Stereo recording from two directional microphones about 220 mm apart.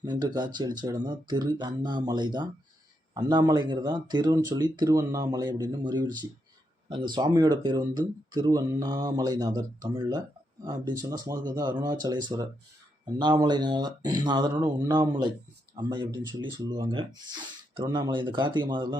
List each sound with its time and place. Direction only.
0.0 s speech: 20° right (ahead or behind)